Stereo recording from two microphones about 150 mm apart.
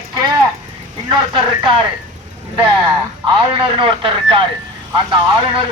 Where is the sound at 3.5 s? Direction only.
35° right (ahead or behind).